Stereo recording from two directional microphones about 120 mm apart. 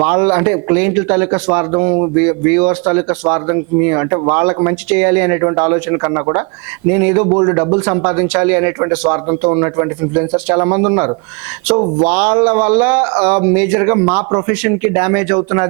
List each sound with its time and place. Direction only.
0.0 s a man's voice: 20° right (ahead or behind)